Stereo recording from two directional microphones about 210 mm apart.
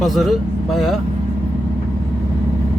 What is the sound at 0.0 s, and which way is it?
Speech, centre (ahead or behind).